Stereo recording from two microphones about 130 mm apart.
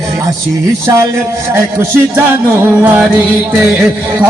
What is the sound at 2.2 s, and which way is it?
Music, 20° right (ahead or behind).